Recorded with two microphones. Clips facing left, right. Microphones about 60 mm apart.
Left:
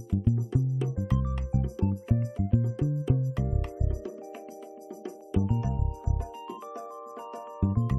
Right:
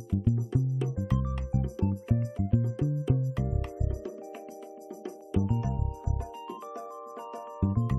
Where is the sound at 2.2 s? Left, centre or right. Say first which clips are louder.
Left 1 dB; centre.